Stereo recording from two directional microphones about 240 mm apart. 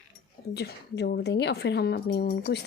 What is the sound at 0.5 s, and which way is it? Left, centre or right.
Speech, left.